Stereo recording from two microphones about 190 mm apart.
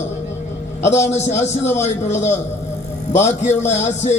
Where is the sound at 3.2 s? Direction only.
35° left (ahead or behind).